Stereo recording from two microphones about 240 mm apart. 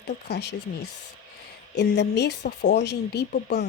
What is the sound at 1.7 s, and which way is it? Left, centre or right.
Speech, left.